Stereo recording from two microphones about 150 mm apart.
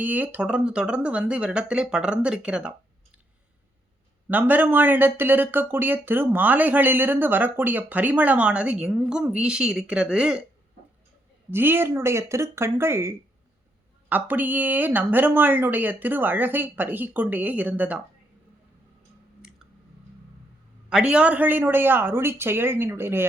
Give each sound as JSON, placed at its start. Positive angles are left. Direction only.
{"t": 0.0, "sound": "speech", "side_deg": -10}
{"t": 4.3, "sound": "speech", "side_deg": -10}
{"t": 11.5, "sound": "speech", "side_deg": -15}
{"t": 19.4, "sound": "clicking", "side_deg": -5}
{"t": 20.9, "sound": "speech", "side_deg": -5}